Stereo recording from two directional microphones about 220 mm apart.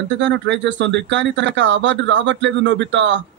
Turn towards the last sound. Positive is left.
turn(degrees=-55)  # may be behind; listen again after turning